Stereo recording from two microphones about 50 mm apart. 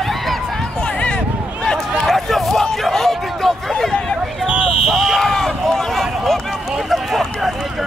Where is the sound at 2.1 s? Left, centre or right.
Centre.